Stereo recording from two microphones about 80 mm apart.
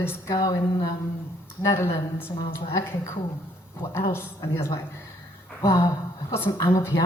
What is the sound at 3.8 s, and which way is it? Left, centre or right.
A woman's voice, left.